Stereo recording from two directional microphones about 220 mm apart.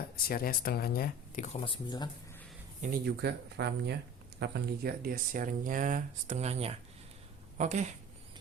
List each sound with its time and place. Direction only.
0.3 s speech: 40° left (ahead or behind)
1.5 s speech: 25° left (ahead or behind)
2.8 s speech: 45° right (ahead or behind)